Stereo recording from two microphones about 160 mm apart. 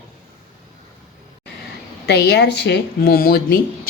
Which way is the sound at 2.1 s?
90° left.